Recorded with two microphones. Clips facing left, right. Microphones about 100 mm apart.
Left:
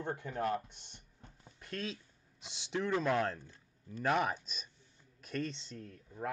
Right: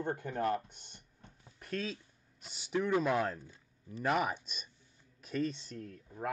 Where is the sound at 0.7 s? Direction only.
50° right (ahead or behind).